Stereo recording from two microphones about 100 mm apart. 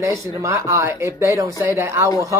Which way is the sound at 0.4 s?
30° right (ahead or behind).